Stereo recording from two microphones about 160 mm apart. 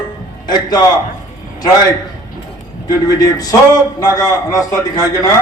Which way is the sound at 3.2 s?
25° left (ahead or behind).